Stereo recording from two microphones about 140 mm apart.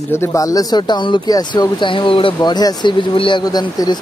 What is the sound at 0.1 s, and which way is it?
Speech, 20° left (ahead or behind).